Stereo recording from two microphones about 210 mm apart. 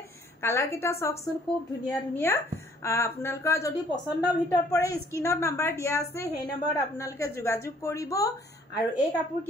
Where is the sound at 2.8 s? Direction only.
15° left (ahead or behind).